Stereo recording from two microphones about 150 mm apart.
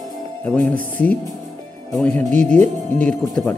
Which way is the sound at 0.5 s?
10° left (ahead or behind).